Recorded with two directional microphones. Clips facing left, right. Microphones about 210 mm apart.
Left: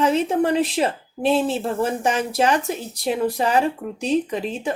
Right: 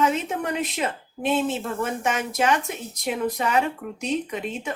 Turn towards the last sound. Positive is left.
turn(degrees=30)  # may be behind; listen again after turning